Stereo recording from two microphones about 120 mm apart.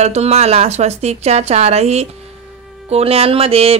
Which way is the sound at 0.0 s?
65° right (ahead or behind).